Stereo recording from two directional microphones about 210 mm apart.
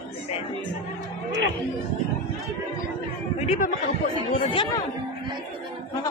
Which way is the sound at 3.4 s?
35° left (ahead or behind).